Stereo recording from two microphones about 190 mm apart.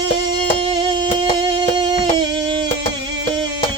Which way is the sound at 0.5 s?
25° right (ahead or behind).